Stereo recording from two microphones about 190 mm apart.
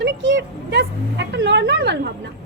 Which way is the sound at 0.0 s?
80° right.